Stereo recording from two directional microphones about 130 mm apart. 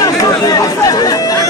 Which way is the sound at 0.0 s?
30° left (ahead or behind).